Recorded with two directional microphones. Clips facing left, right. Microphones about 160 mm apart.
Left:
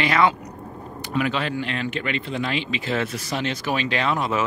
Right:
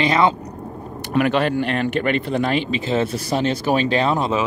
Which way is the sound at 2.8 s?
25° right (ahead or behind).